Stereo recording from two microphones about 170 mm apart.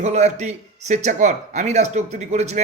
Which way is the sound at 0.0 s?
40° right (ahead or behind).